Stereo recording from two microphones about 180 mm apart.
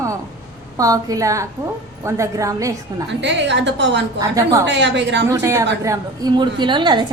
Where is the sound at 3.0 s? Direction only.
75° right (ahead or behind).